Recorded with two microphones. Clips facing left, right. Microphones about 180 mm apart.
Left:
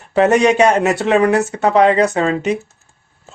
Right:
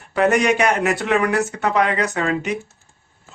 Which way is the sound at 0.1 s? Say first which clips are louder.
Left 5 dB; 25° left (ahead or behind).